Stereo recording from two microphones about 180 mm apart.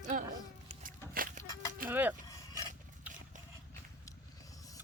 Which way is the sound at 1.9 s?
10° right (ahead or behind).